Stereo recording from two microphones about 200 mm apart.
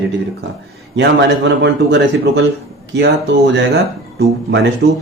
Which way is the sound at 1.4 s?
60° right (ahead or behind).